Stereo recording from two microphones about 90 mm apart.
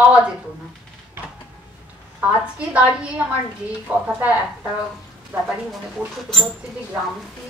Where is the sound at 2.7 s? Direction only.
15° right (ahead or behind).